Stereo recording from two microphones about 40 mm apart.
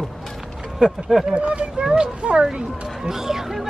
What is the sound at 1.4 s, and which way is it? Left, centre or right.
Speech, right.